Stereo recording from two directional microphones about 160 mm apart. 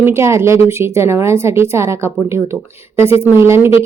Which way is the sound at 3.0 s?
35° left (ahead or behind).